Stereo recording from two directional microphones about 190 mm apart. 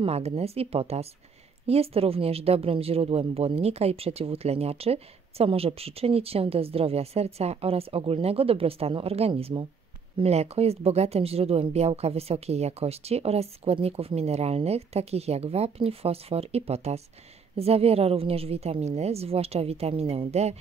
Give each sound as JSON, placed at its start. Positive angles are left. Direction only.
{"t": 0.0, "sound": "speech", "side_deg": -30}